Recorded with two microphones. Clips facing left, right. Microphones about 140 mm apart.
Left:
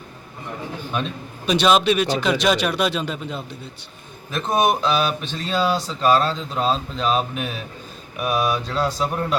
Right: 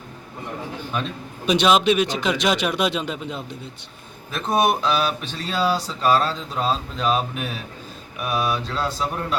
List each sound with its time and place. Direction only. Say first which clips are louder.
1.5 s speech: even; 15° right (ahead or behind)
4.3 s speech: left 1 dB; 5° right (ahead or behind)